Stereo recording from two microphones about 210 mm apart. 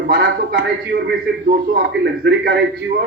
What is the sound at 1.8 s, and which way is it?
Speech, 50° right (ahead or behind).